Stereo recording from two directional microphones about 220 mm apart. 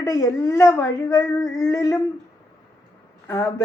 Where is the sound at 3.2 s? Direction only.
15° left (ahead or behind).